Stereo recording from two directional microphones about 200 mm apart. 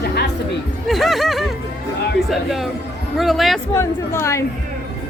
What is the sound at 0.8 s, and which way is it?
Music, centre (ahead or behind).